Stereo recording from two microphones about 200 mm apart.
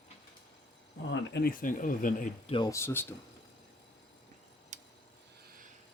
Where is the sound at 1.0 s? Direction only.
60° left (ahead or behind); by 2.5 s 40° left (ahead or behind).